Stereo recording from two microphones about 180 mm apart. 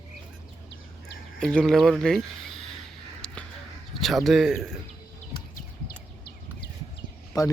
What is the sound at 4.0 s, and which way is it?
Speech, centre (ahead or behind).